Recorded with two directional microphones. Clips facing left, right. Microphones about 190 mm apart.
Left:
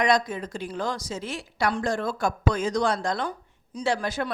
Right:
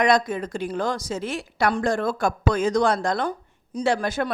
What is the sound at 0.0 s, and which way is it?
A woman's voice, 55° right (ahead or behind).